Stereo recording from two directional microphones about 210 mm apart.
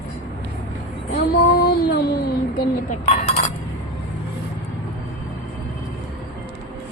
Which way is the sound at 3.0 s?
30° left (ahead or behind).